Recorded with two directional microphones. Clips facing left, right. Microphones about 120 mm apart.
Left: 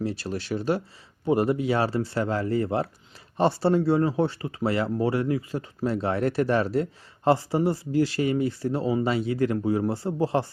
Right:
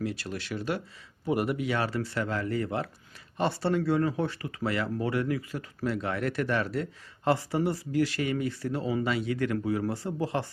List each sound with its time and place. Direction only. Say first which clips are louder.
0.0 s speech: left 4 dB; 30° left (ahead or behind)